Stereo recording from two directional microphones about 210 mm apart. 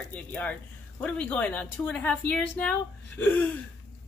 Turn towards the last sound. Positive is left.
turn(degrees=5)  # may be behind; listen again after turning